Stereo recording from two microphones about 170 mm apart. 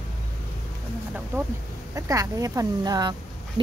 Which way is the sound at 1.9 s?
20° right (ahead or behind).